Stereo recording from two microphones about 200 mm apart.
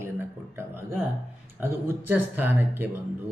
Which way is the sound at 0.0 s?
10° right (ahead or behind).